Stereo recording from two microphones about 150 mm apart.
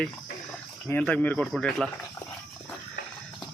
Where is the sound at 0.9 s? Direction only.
10° left (ahead or behind).